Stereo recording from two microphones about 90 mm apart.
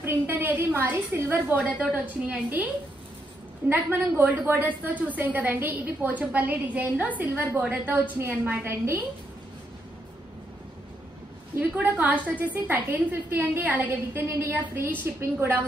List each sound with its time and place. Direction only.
0.0 s a woman's voice: 25° right (ahead or behind)
11.7 s a woman's voice: 20° right (ahead or behind)